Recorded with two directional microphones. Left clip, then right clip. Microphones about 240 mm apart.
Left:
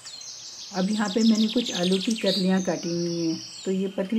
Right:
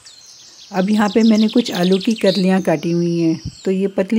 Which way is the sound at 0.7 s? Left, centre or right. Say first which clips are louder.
Right 9 dB; right.